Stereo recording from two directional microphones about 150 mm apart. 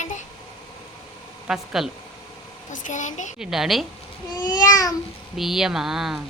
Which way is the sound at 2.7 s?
55° left (ahead or behind).